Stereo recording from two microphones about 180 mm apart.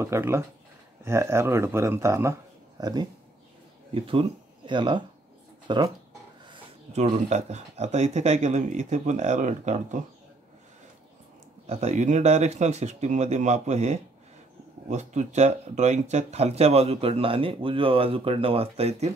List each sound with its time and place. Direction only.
0.0 s speech: 15° right (ahead or behind)
6.5 s speech: 40° right (ahead or behind)
11.6 s speech: 35° right (ahead or behind)